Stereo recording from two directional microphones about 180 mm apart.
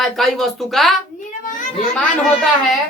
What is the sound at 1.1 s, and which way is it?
Speech, 45° left (ahead or behind).